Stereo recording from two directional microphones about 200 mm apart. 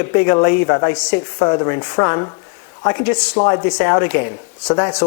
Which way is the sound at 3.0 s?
10° left (ahead or behind).